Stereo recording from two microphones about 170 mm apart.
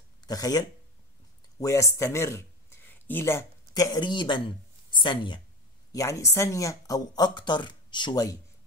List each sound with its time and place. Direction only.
0.2 s speech: 20° left (ahead or behind)